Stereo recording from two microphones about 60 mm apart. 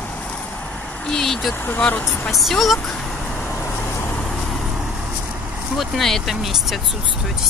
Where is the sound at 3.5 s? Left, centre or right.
Left.